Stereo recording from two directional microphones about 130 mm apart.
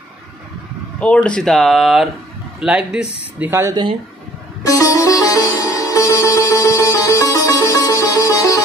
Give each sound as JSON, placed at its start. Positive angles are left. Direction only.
{"t": 0.9, "sound": "a man's voice", "side_deg": 10}
{"t": 4.6, "sound": "music", "side_deg": 25}